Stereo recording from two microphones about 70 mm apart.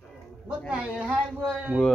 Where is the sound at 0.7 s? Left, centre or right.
Right.